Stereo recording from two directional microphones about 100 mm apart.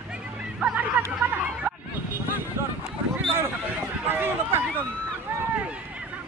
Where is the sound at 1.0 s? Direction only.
15° right (ahead or behind).